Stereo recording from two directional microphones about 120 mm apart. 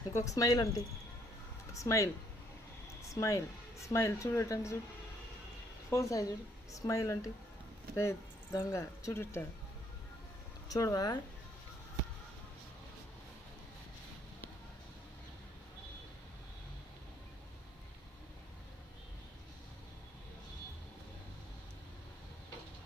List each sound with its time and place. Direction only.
0.1 s speech: 25° left (ahead or behind)
1.8 s speech: 25° left (ahead or behind)
5.9 s speech: 25° left (ahead or behind)
8.5 s speech: 25° left (ahead or behind)
10.7 s speech: 30° left (ahead or behind)